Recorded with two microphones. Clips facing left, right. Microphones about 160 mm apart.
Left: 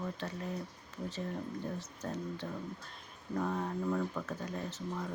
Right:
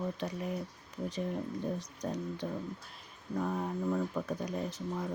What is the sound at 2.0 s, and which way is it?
Speech, 15° right (ahead or behind).